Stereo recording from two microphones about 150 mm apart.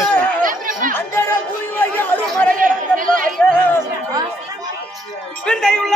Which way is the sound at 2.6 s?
65° right (ahead or behind).